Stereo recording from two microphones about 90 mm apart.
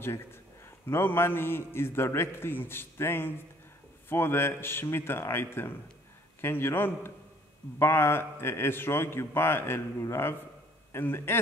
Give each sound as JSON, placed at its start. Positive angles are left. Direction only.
{"t": 0.0, "sound": "a man's voice", "side_deg": 30}